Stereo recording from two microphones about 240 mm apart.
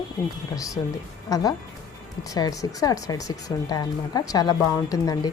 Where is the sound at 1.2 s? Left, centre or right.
Centre.